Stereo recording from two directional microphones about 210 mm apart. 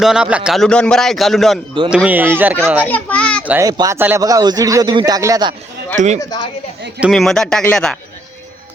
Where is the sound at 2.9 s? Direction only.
5° left (ahead or behind).